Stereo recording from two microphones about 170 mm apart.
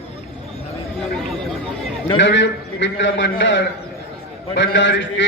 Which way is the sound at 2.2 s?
90° left.